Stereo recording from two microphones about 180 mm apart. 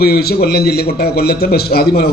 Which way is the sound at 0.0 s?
60° left (ahead or behind).